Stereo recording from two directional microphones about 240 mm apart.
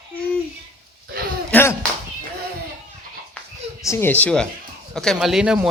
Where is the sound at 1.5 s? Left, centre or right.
Centre.